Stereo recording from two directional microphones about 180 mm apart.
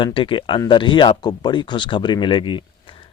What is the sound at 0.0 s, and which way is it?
Speech, 30° left (ahead or behind).